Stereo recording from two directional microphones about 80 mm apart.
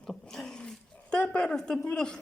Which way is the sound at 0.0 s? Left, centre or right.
Centre.